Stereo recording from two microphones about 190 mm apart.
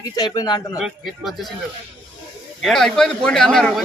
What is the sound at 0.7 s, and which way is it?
Speech, centre (ahead or behind).